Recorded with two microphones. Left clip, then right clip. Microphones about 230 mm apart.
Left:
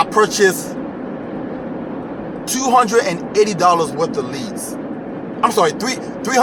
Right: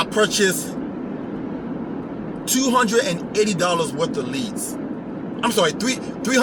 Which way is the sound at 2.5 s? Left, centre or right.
Centre.